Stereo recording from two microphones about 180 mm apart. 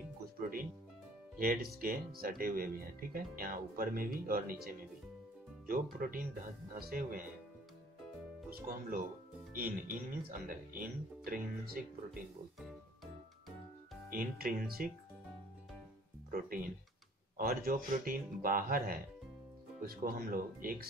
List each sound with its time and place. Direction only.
1.4 s speech: 55° right (ahead or behind)
5.7 s speech: 50° right (ahead or behind)
8.5 s speech: 50° right (ahead or behind)
14.1 s speech: 55° right (ahead or behind)
16.3 s speech: 50° right (ahead or behind)